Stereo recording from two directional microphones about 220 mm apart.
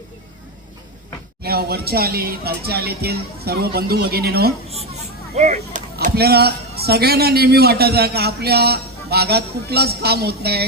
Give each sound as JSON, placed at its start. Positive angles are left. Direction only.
{"t": 1.4, "sound": "speech", "side_deg": -45}
{"t": 5.4, "sound": "speech", "side_deg": -35}